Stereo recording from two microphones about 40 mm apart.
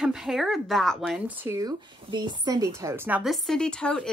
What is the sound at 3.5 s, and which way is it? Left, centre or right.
Speech, left.